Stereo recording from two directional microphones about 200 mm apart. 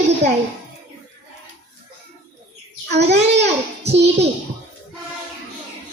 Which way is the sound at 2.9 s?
55° right (ahead or behind).